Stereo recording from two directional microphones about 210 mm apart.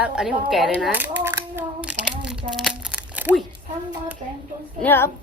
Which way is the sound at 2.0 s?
5° right (ahead or behind).